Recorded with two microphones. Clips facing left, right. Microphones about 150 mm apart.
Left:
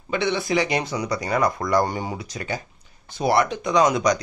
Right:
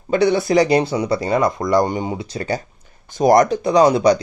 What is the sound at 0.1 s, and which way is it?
Speech, 40° right (ahead or behind).